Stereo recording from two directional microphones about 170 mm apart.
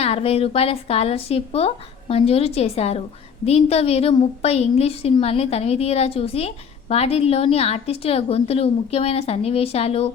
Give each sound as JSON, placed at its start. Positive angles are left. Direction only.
{"t": 0.0, "sound": "a woman's voice", "side_deg": 35}